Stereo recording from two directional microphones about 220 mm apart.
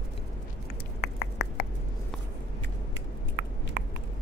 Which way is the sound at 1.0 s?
50° left (ahead or behind).